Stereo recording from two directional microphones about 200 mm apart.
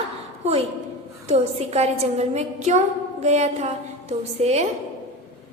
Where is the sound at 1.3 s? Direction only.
30° right (ahead or behind).